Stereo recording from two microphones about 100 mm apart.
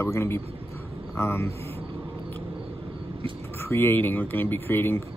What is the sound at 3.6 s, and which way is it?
Speech, 20° left (ahead or behind).